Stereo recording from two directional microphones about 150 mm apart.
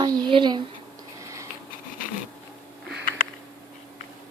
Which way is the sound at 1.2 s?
20° right (ahead or behind).